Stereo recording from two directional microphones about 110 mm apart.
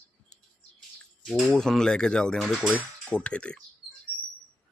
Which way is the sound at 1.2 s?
Centre (ahead or behind).